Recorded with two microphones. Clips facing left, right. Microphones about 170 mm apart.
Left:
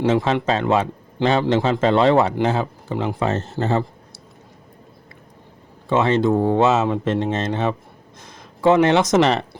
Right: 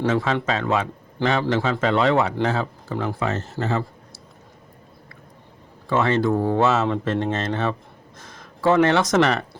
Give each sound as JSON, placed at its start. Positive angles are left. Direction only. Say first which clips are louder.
{"t": 0.0, "sound": "speech", "louder": "left 3 dB", "side_deg": 25}
{"t": 2.3, "sound": "speech", "louder": "left 3 dB", "side_deg": 20}
{"t": 3.2, "sound": "speech", "louder": "left 3 dB", "side_deg": 30}
{"t": 5.9, "sound": "speech", "louder": "left 3 dB", "side_deg": 20}